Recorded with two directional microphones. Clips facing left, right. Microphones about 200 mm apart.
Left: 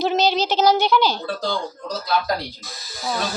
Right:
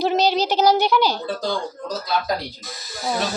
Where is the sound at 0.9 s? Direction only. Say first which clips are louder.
Even; 5° right (ahead or behind).